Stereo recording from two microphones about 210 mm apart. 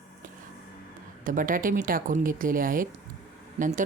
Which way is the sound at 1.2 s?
40° right (ahead or behind).